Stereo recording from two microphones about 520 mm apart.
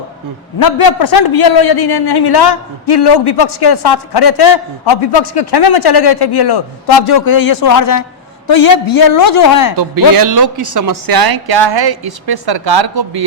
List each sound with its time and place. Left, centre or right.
0.6 s a man's voice: left
9.7 s speech: right